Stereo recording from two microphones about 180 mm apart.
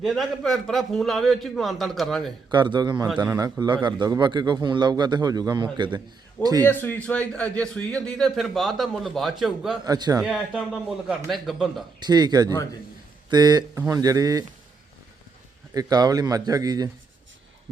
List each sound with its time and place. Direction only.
0.0 s a man's voice: centre (ahead or behind)
2.5 s a man's voice: 25° right (ahead or behind)
6.7 s a man's voice: 10° left (ahead or behind)
9.8 s a man's voice: 20° right (ahead or behind)
10.2 s a man's voice: 5° right (ahead or behind)
11.9 s a man's voice: 25° right (ahead or behind)
15.7 s a man's voice: 20° right (ahead or behind)